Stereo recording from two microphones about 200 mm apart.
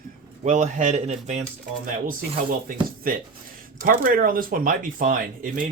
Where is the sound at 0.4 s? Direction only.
40° right (ahead or behind).